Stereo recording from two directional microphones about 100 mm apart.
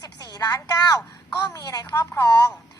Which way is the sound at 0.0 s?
40° left (ahead or behind).